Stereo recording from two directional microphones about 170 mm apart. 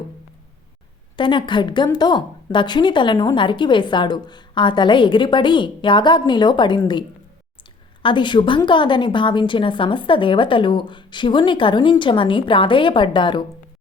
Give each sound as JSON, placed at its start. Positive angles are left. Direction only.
{"t": 1.1, "sound": "a woman's voice", "side_deg": 30}
{"t": 8.0, "sound": "a woman's voice", "side_deg": 25}